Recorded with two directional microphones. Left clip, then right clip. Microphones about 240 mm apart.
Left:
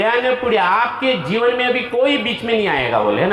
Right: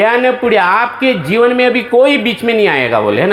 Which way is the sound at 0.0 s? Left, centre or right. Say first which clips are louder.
Right 6 dB; right.